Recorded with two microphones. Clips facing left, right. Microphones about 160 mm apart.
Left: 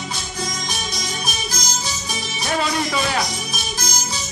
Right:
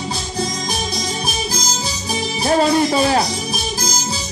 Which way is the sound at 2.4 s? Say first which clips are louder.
Right 8 dB; 35° right (ahead or behind).